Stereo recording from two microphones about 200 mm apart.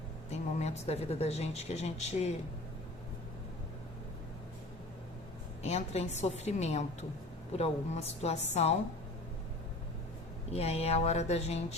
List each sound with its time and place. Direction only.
0.3 s speech: 35° left (ahead or behind)
5.6 s speech: 30° left (ahead or behind)
10.5 s speech: 30° left (ahead or behind)